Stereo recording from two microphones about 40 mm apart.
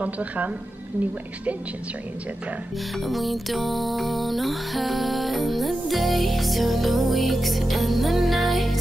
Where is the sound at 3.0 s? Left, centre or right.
Centre.